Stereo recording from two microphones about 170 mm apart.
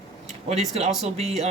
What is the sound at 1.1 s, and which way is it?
Speech, 35° right (ahead or behind).